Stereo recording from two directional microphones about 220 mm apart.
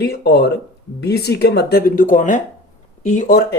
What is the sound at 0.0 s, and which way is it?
A man's voice, 45° left (ahead or behind).